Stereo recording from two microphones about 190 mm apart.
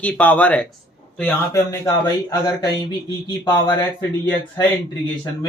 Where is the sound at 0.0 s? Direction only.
10° left (ahead or behind).